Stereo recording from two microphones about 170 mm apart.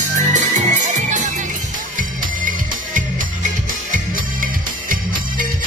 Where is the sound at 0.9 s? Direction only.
45° right (ahead or behind).